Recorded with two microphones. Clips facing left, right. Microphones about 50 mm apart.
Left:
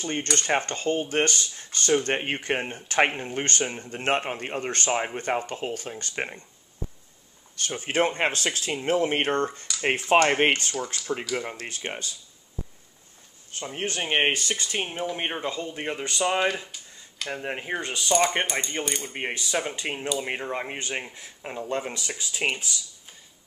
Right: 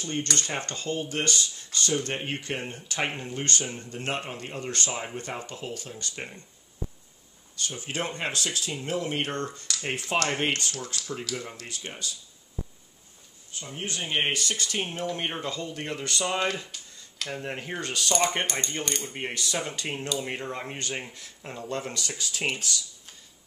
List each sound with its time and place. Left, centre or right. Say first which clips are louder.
0.0 s speech: left 2 dB; left
7.5 s speech: left 7 dB; left
10.9 s speech: even; centre
11.3 s speech: left 5 dB; left
13.7 s speech: left 4 dB; left; by 18.1 s centre
18.1 s speech: left 4 dB; centre
19.1 s speech: left 5 dB; left